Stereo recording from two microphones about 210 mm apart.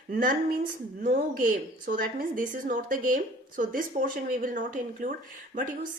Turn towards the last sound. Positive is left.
turn(degrees=-40)  # may be behind; listen again after turning